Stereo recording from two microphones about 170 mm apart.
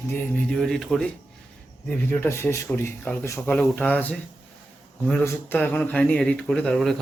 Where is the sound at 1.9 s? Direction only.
10° left (ahead or behind).